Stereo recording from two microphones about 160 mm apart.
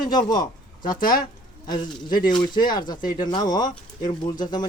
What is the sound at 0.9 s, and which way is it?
Speech, 60° left (ahead or behind).